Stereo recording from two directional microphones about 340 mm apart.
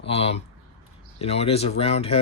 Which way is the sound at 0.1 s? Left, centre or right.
Centre.